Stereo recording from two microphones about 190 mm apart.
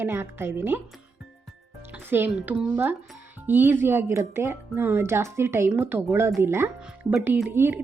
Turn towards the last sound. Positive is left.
turn(degrees=-10)  # may be behind; listen again after turning